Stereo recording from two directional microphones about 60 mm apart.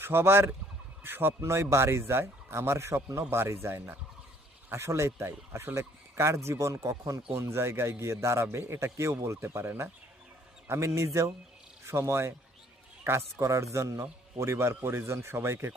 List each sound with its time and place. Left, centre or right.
0.0 s speech: right
14.0 s speech: right